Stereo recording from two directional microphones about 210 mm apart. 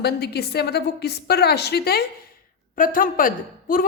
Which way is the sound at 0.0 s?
50° left (ahead or behind).